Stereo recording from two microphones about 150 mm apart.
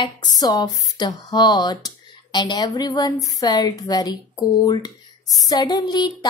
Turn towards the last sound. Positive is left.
turn(degrees=30)  # may be behind; listen again after turning